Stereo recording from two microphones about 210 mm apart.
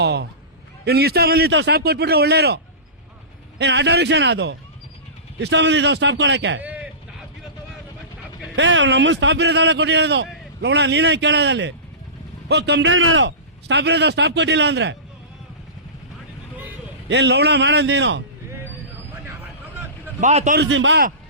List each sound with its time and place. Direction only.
0.0 s a sound: 50° right (ahead or behind)
0.9 s a man's voice: 50° right (ahead or behind)
3.6 s a man's voice: 55° right (ahead or behind)
6.6 s vehicle: 5° right (ahead or behind)
8.5 s a man's voice: 60° right (ahead or behind)
17.1 s a man's voice: 55° right (ahead or behind)
20.2 s a man's voice: 35° right (ahead or behind)
20.6 s a man's voice: 60° right (ahead or behind)